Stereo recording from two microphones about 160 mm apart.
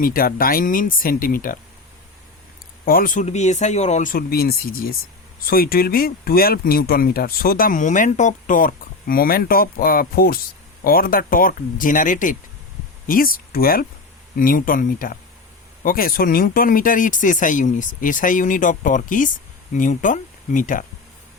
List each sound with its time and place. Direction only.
0.0 s speech: 65° left (ahead or behind)
2.8 s speech: 60° left (ahead or behind)